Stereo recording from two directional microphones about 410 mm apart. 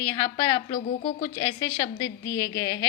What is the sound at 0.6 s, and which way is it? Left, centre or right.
A woman's voice, centre.